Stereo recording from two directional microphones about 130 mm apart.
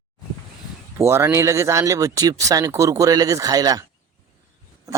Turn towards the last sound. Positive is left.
turn(degrees=-25)  # may be behind; listen again after turning